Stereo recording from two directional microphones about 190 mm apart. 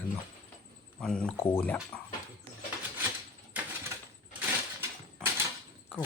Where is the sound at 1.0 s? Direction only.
5° left (ahead or behind).